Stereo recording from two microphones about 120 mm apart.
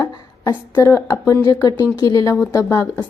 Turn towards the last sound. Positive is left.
turn(degrees=30)  # may be behind; listen again after turning